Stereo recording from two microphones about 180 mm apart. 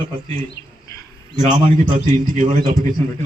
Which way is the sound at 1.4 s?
45° right (ahead or behind).